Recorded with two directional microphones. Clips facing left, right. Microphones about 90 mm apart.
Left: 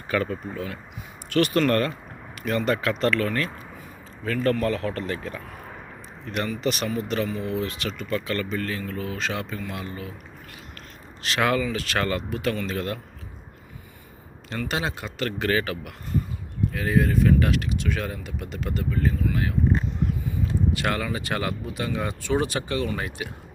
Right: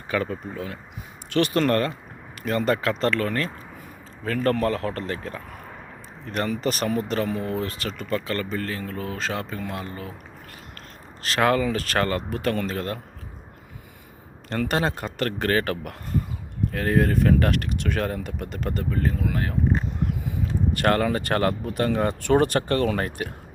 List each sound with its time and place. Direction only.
0.1 s speech: 15° right (ahead or behind); by 3.5 s 35° right (ahead or behind)
4.6 s speech: 40° right (ahead or behind)
7.3 s speech: 55° right (ahead or behind)
7.5 s speech: 40° right (ahead or behind)
11.2 s speech: 35° right (ahead or behind)
14.5 s speech: 55° right (ahead or behind)
20.2 s a sound: 75° right (ahead or behind)
20.8 s speech: 50° right (ahead or behind)